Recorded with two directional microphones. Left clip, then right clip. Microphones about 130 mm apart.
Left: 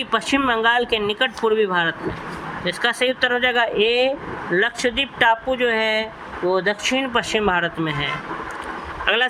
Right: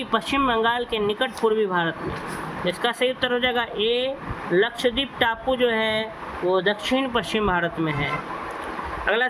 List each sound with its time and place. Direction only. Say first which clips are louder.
0.1 s speech: left 2 dB; 45° left (ahead or behind)
9.1 s speech: left 3 dB; 45° left (ahead or behind)